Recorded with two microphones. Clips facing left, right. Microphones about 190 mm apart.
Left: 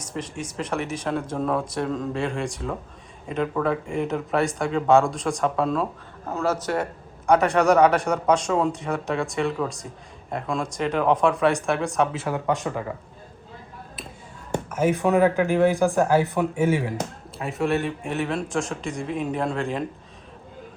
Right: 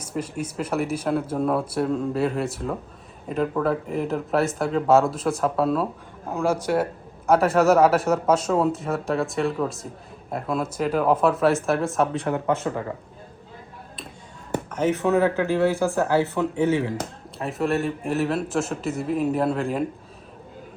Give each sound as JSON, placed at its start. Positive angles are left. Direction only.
{"t": 0.0, "sound": "speech", "side_deg": -5}
{"t": 12.5, "sound": "speech", "side_deg": 15}
{"t": 14.7, "sound": "speech", "side_deg": 10}
{"t": 17.3, "sound": "speech", "side_deg": 0}